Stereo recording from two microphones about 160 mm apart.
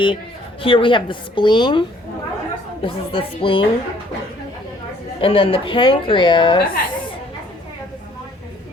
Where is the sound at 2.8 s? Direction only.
35° left (ahead or behind).